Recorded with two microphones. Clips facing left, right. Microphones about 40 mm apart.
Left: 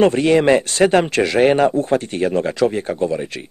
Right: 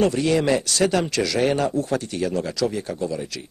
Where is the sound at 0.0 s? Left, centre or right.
Left.